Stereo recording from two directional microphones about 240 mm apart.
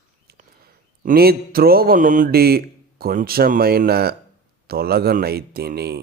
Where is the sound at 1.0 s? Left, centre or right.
Right.